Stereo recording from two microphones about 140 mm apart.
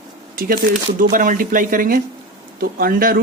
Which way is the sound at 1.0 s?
75° right (ahead or behind).